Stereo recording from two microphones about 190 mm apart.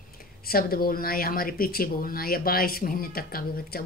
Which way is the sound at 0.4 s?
50° left (ahead or behind).